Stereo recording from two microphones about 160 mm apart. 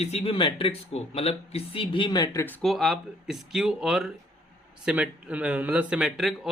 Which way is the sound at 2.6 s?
Centre (ahead or behind).